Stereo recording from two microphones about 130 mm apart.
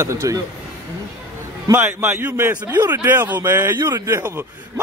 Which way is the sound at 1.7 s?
15° right (ahead or behind).